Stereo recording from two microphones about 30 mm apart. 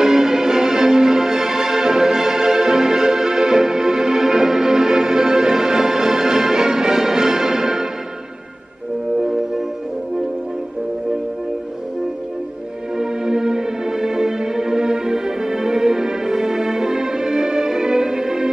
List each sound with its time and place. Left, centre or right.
0.0 s music: centre
12.9 s music: right